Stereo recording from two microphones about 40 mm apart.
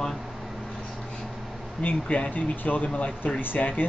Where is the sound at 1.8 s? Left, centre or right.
Left.